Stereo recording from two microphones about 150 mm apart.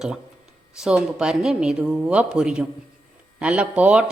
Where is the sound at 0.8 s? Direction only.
5° right (ahead or behind).